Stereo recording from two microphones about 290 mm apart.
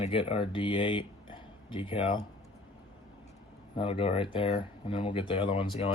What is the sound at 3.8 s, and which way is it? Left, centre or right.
Speech, centre.